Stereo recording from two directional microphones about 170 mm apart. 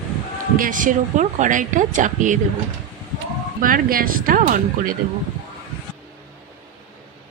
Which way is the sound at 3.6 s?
55° right (ahead or behind).